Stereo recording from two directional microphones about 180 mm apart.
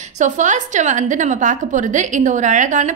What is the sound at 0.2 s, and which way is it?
A woman's voice, 45° right (ahead or behind).